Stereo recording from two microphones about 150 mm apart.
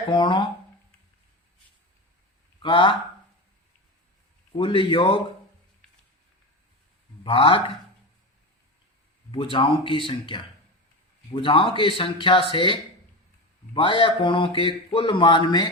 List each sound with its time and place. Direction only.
0.1 s speech: 35° left (ahead or behind)
2.6 s speech: 35° left (ahead or behind)
4.5 s speech: 35° left (ahead or behind)
7.3 s speech: 35° left (ahead or behind)
9.3 s speech: 35° left (ahead or behind)